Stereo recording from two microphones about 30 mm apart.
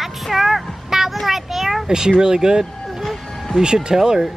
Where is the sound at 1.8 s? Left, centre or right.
Right.